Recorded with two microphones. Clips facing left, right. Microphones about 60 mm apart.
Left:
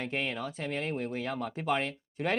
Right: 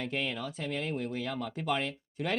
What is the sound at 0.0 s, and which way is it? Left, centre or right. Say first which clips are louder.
Speech: left 1 dB; left.